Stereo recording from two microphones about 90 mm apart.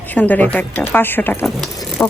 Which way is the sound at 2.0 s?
25° left (ahead or behind).